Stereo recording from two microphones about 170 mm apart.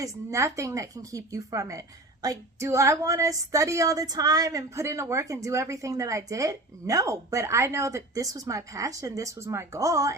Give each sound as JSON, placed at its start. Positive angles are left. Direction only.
{"t": 0.0, "sound": "a woman's voice", "side_deg": -15}